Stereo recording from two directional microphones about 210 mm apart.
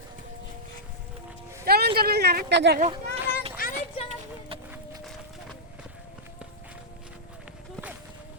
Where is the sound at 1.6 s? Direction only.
50° right (ahead or behind).